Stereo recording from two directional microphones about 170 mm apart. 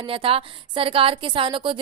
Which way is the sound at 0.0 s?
30° right (ahead or behind).